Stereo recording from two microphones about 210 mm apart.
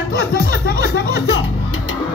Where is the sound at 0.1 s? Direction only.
45° left (ahead or behind).